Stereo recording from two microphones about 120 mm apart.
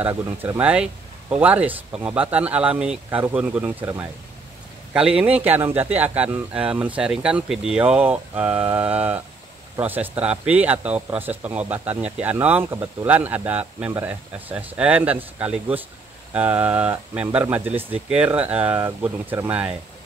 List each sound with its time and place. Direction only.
0.1 s speech: 25° right (ahead or behind)
0.6 s speech: 10° right (ahead or behind)
4.9 s speech: 10° right (ahead or behind)